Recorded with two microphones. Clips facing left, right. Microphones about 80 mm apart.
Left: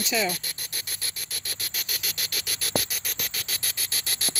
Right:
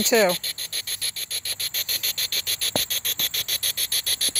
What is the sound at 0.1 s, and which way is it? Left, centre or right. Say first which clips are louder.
Speech: right 9 dB; right.